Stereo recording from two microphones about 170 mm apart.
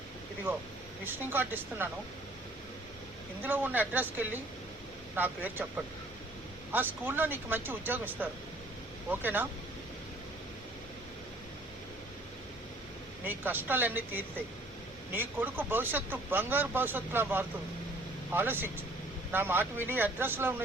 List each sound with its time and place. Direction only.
1.0 s speech: 10° right (ahead or behind)
3.4 s speech: 10° right (ahead or behind)
13.2 s speech: 10° right (ahead or behind)